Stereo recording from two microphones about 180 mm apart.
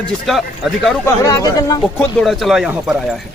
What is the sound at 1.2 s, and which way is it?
Speech, 20° left (ahead or behind).